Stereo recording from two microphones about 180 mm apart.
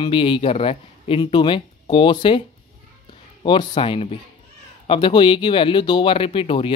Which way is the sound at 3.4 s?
25° left (ahead or behind).